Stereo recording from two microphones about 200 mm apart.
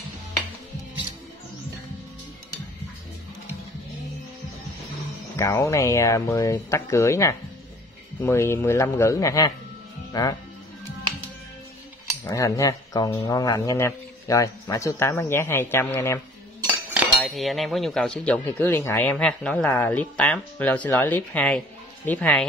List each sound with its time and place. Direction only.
5.3 s speech: 15° left (ahead or behind)
12.3 s speech: 15° left (ahead or behind)
16.6 s cutlery: 10° right (ahead or behind)
17.2 s speech: centre (ahead or behind)